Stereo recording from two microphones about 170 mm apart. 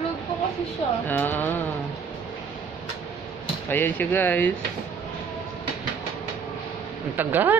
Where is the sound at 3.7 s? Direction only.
10° left (ahead or behind).